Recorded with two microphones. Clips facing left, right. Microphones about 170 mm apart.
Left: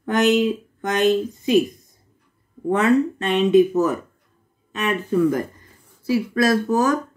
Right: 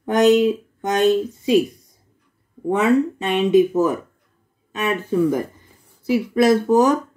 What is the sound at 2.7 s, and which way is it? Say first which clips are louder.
Speech: even; 10° right (ahead or behind).